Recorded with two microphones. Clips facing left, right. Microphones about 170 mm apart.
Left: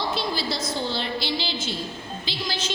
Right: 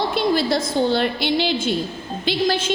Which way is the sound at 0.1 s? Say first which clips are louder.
Right 8 dB; 55° right (ahead or behind).